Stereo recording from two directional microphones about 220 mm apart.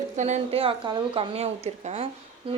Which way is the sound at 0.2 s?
30° right (ahead or behind).